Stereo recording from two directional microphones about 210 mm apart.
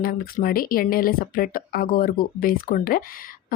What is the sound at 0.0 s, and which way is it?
Speech, 40° left (ahead or behind).